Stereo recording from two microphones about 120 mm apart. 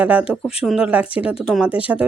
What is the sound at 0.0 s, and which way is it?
Speech, 15° right (ahead or behind).